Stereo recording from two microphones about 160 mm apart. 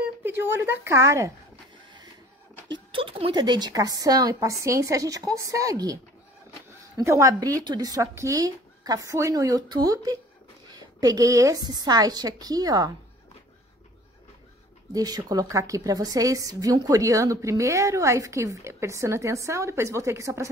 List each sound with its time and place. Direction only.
0.2 s speech: 15° right (ahead or behind)
2.7 s a woman's voice: 35° right (ahead or behind)
7.0 s a woman's voice: 20° right (ahead or behind)
15.0 s a woman's voice: 25° right (ahead or behind)